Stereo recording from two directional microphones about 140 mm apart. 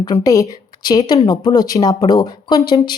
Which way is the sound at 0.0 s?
25° left (ahead or behind).